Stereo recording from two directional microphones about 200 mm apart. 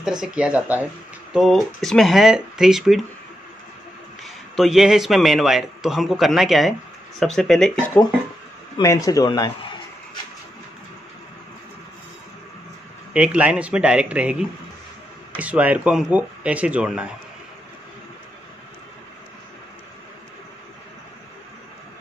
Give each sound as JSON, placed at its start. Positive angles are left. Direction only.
{"t": 0.0, "sound": "a man's voice", "side_deg": -5}
{"t": 4.2, "sound": "a man's voice", "side_deg": 0}
{"t": 8.7, "sound": "a man's voice", "side_deg": 15}
{"t": 13.1, "sound": "a man's voice", "side_deg": -5}